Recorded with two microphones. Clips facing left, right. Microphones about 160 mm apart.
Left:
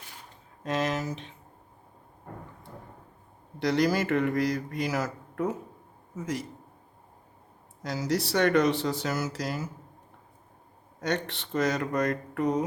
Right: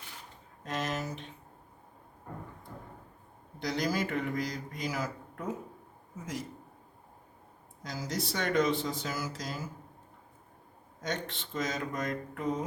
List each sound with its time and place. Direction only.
0.6 s a sound: 90° left
3.6 s a man's voice: 70° left (ahead or behind)
7.9 s a man's voice: 70° left (ahead or behind)
11.0 s a man's voice: 65° left (ahead or behind)